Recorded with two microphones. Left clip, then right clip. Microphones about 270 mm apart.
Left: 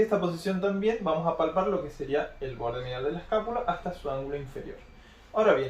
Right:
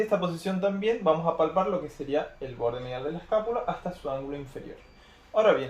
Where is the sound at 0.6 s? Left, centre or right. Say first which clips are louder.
Right 3 dB; right.